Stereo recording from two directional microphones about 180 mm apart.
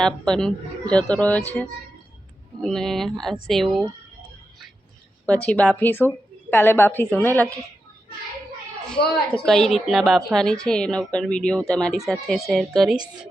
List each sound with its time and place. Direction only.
0.0 s speech: 5° left (ahead or behind)
5.2 s a woman's voice: 5° left (ahead or behind)
9.0 s a woman's voice: 60° left (ahead or behind)
9.5 s speech: centre (ahead or behind)